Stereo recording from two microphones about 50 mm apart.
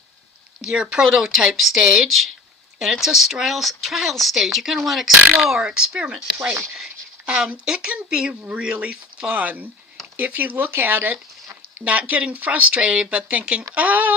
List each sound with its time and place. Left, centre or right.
0.6 s speech: centre
1.0 s speech: centre
1.8 s speech: centre
2.7 s speech: centre
7.9 s speech: right
11.9 s speech: right
13.7 s speech: right